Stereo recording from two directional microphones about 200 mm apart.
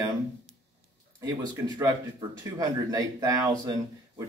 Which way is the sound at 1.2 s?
20° right (ahead or behind).